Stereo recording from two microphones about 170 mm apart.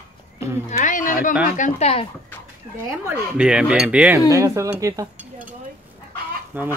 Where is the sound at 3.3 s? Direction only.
5° right (ahead or behind).